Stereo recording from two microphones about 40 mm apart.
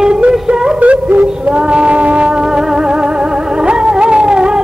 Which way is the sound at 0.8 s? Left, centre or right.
Right.